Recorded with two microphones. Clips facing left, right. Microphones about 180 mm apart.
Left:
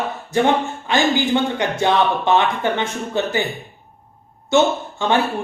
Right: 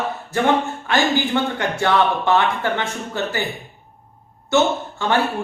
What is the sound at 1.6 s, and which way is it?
Speech, 20° left (ahead or behind).